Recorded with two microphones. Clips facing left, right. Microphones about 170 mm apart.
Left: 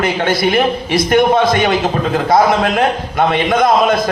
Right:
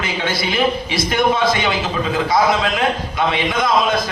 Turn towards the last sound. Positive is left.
turn(degrees=55)  # may be behind; listen again after turning